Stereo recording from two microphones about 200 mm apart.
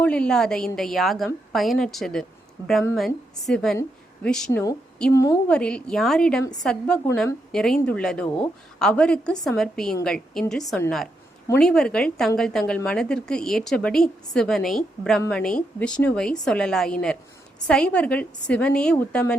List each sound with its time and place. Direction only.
0.0 s a woman's voice: 5° left (ahead or behind)
3.4 s a woman's voice: centre (ahead or behind)
5.1 s a woman's voice: 15° left (ahead or behind)
5.5 s a woman's voice: 5° left (ahead or behind)